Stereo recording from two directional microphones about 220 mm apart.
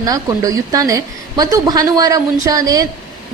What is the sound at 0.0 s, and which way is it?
A woman's voice, 15° right (ahead or behind).